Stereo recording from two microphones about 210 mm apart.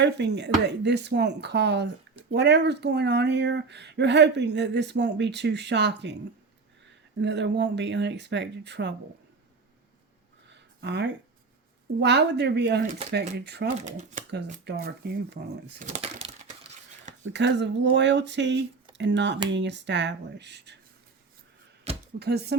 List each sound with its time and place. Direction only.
0.0 s speech: 55° right (ahead or behind)
7.2 s speech: 55° right (ahead or behind)
10.5 s a sound: 55° right (ahead or behind)
11.9 s speech: 55° right (ahead or behind)
14.2 s speech: 40° right (ahead or behind)
14.6 s speech: 50° right (ahead or behind)
15.8 s a sound: 30° right (ahead or behind)
17.2 s speech: 55° right (ahead or behind)
21.9 s a sound: 30° right (ahead or behind)
22.2 s speech: 50° right (ahead or behind)